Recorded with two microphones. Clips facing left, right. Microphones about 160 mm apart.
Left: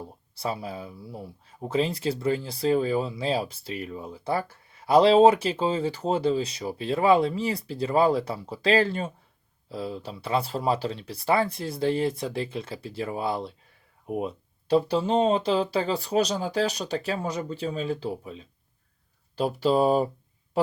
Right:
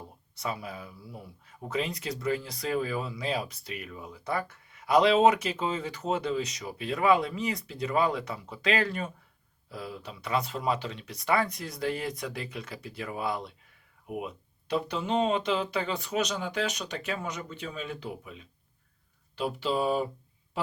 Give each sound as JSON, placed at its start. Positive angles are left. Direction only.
{"t": 0.3, "sound": "speech", "side_deg": 30}